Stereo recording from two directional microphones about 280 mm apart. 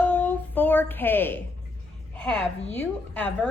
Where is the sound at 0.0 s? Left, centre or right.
Centre.